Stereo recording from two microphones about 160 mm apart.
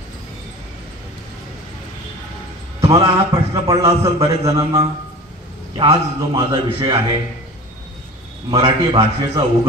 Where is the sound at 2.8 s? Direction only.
20° right (ahead or behind).